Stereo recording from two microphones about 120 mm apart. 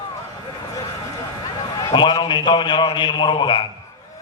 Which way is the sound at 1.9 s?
40° left (ahead or behind).